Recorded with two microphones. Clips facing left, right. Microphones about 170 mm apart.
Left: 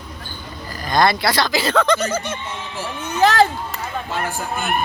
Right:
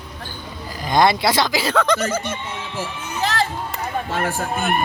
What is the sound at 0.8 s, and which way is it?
Speech, 20° right (ahead or behind).